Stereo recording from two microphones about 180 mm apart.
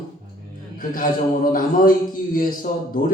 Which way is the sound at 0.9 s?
50° left (ahead or behind).